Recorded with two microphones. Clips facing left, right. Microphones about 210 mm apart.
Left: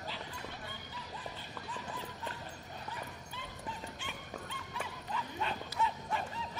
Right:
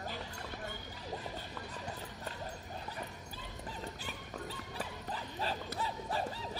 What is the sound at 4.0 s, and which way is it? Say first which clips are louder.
Dog: right 1 dB; 35° right (ahead or behind).